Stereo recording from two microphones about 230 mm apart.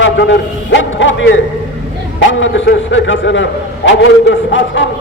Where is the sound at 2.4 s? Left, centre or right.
Left.